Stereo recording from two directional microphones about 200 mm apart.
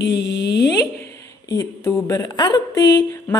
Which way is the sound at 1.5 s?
15° left (ahead or behind).